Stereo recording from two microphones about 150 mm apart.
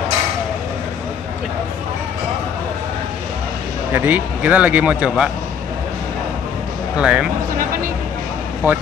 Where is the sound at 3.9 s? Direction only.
10° right (ahead or behind).